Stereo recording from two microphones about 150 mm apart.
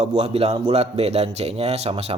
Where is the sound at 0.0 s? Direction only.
45° right (ahead or behind).